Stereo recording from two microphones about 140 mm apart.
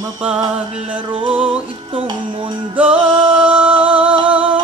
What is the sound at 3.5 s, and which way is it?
Music, 40° right (ahead or behind).